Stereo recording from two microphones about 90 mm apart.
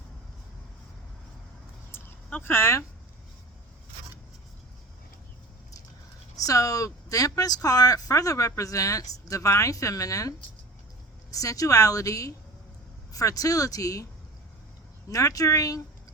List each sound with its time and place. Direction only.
1.9 s a sound: 25° left (ahead or behind)
6.3 s speech: 40° left (ahead or behind)
15.1 s speech: 40° left (ahead or behind)